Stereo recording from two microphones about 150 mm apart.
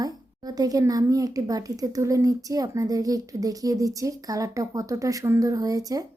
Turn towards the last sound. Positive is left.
turn(degrees=-25)  # may be behind; listen again after turning